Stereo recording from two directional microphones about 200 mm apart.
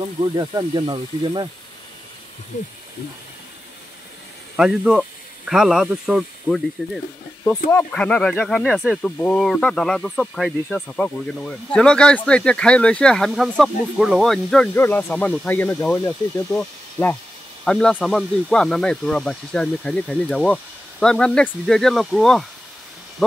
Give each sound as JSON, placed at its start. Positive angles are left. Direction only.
{"t": 0.4, "sound": "speech", "side_deg": -20}
{"t": 4.6, "sound": "speech", "side_deg": -5}